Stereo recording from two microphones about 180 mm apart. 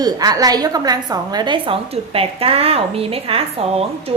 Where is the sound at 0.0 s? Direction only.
20° right (ahead or behind).